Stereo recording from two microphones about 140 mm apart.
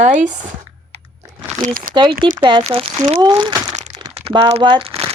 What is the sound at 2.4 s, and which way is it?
Speech, 35° right (ahead or behind).